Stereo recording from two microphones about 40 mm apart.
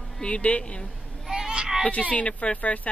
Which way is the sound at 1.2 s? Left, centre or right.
Centre.